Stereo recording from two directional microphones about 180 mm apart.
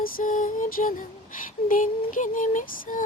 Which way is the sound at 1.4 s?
50° left (ahead or behind).